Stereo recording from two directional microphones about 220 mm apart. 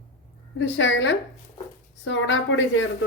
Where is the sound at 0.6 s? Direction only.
55° left (ahead or behind).